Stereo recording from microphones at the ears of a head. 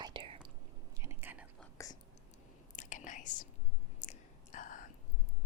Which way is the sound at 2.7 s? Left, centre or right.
Left.